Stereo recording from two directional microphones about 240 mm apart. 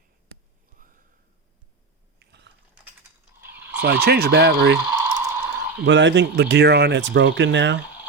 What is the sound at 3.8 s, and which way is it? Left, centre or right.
Speech, right.